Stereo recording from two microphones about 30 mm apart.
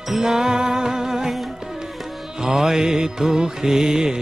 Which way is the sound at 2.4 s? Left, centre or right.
Centre.